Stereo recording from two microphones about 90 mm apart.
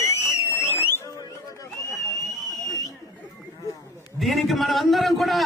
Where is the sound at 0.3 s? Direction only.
30° left (ahead or behind).